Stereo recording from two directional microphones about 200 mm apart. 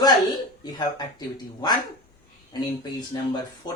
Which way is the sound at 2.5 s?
20° left (ahead or behind).